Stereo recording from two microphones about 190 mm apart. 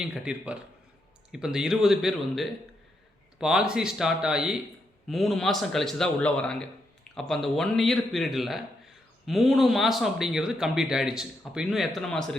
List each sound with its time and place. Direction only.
0.0 s speech: 5° right (ahead or behind)